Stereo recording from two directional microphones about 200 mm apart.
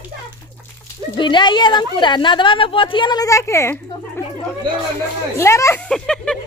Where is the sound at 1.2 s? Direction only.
25° left (ahead or behind).